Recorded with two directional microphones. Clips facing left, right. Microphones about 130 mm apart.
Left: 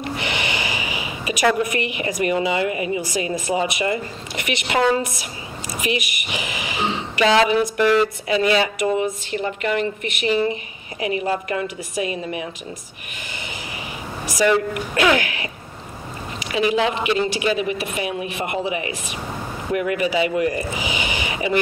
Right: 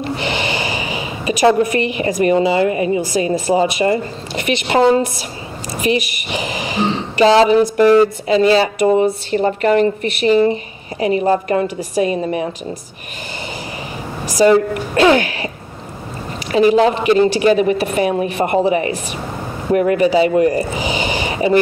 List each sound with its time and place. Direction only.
0.0 s a woman's voice: 30° right (ahead or behind)
14.3 s speech: 30° right (ahead or behind)
16.5 s speech: 40° right (ahead or behind)